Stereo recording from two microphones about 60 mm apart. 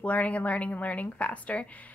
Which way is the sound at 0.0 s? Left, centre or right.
Left.